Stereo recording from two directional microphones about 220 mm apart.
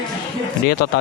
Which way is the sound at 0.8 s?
45° left (ahead or behind).